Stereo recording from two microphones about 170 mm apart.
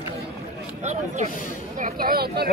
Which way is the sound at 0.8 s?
45° right (ahead or behind).